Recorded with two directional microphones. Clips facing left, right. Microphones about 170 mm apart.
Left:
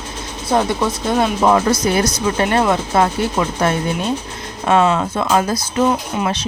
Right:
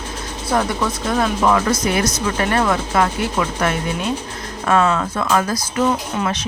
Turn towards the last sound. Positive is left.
turn(degrees=25)  # may be behind; listen again after turning